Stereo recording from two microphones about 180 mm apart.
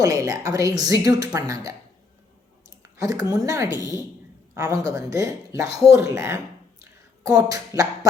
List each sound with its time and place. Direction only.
0.0 s speech: 20° right (ahead or behind)
3.0 s a woman's voice: 20° right (ahead or behind)